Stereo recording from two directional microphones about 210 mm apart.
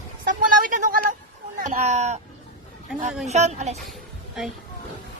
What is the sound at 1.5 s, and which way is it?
Speech, 40° right (ahead or behind).